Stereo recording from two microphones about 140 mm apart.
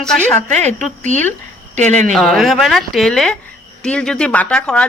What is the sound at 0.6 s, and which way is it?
Speech, 60° right (ahead or behind).